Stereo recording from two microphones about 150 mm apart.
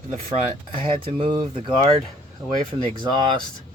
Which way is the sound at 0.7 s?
35° right (ahead or behind).